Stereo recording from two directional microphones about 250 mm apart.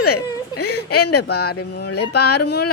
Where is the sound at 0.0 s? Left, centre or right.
Left.